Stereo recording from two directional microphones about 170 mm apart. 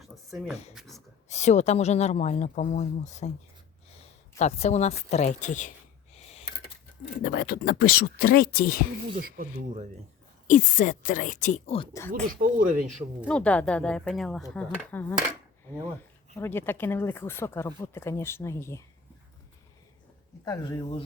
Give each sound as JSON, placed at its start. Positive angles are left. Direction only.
{"t": 0.0, "sound": "a sound", "side_deg": 0}
{"t": 1.3, "sound": "speech", "side_deg": 45}
{"t": 4.4, "sound": "speech", "side_deg": 40}
{"t": 7.3, "sound": "speech", "side_deg": 60}
{"t": 9.1, "sound": "speech", "side_deg": -55}
{"t": 10.4, "sound": "speech", "side_deg": 50}
{"t": 12.1, "sound": "speech", "side_deg": -55}
{"t": 13.2, "sound": "speech", "side_deg": 5}
{"t": 16.4, "sound": "speech", "side_deg": 15}
{"t": 20.4, "sound": "speech", "side_deg": 20}